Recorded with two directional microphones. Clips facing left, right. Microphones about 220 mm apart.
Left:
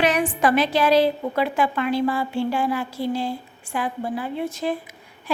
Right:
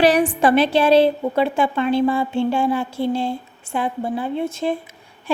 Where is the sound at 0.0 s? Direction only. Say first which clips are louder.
Right 5 dB; 30° right (ahead or behind).